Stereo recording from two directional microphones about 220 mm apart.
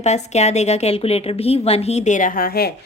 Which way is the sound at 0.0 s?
30° left (ahead or behind).